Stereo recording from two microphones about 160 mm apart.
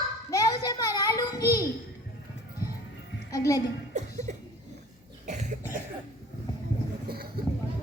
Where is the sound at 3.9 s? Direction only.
45° right (ahead or behind).